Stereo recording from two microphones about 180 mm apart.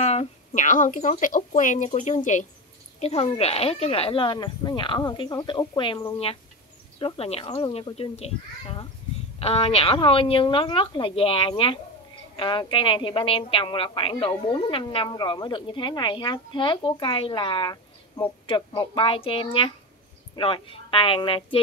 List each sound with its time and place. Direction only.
0.0 s a woman's voice: 35° left (ahead or behind)
9.4 s a woman's voice: 35° left (ahead or behind)